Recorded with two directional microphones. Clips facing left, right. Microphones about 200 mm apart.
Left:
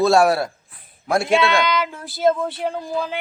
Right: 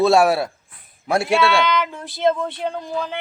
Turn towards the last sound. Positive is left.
turn(degrees=10)  # may be behind; listen again after turning